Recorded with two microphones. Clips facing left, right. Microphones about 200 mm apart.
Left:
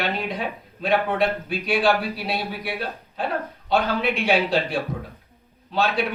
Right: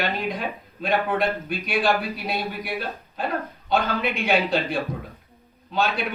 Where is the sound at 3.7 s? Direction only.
Centre (ahead or behind).